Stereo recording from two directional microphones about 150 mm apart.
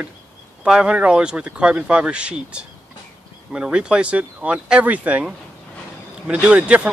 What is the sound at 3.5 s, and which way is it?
Speech, 5° right (ahead or behind).